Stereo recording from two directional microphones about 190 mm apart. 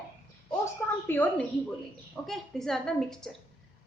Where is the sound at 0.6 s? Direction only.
15° left (ahead or behind).